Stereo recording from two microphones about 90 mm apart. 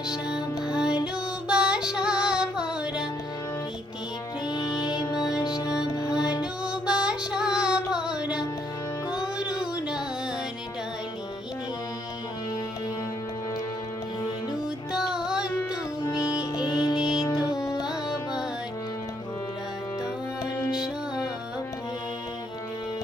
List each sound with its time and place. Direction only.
0.3 s music: 10° right (ahead or behind)
4.4 s music: 50° left (ahead or behind)
5.1 s music: 5° right (ahead or behind)
5.4 s music: 45° left (ahead or behind)
6.1 s music: 10° right (ahead or behind)
14.9 s music: 5° right (ahead or behind)
16.2 s music: 45° left (ahead or behind)
17.0 s music: 5° right (ahead or behind)
17.4 s music: 40° left (ahead or behind)